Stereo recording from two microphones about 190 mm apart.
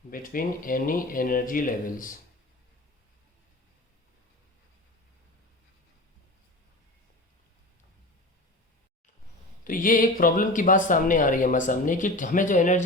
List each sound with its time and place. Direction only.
0.1 s speech: 50° left (ahead or behind)
9.6 s speech: 45° left (ahead or behind)